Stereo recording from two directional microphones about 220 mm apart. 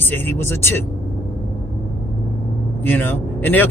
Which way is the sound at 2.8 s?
10° left (ahead or behind).